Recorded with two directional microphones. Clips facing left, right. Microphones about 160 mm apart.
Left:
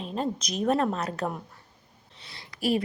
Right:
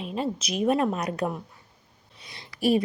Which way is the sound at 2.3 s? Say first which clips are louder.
Right 4 dB; 25° right (ahead or behind).